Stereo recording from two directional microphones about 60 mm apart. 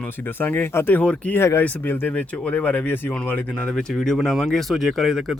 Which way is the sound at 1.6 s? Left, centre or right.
Left.